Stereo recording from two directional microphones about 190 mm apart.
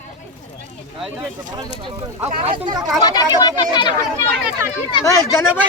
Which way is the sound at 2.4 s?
25° right (ahead or behind).